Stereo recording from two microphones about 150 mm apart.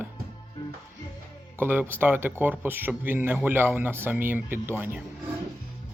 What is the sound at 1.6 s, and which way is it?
Speech, 15° right (ahead or behind).